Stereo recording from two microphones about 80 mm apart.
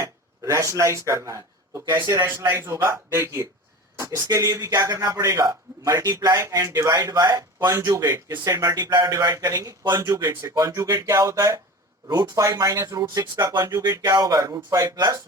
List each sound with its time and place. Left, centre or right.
0.0 s a man's voice: right
13.0 s a man's voice: right